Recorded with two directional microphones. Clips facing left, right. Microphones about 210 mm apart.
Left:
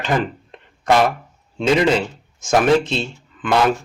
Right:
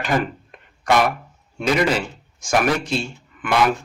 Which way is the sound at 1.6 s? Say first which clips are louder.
Left 3 dB; 25° left (ahead or behind).